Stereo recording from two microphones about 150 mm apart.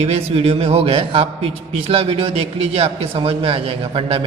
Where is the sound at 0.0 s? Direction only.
40° right (ahead or behind).